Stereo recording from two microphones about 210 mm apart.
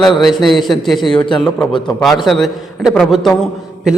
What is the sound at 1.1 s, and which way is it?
Speech, 25° left (ahead or behind).